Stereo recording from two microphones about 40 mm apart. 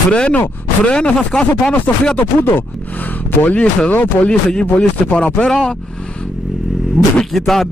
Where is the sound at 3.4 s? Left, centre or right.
Left.